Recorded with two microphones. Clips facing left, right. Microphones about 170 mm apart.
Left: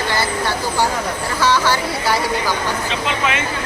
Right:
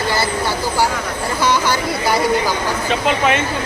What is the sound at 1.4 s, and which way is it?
Vehicle, 15° right (ahead or behind).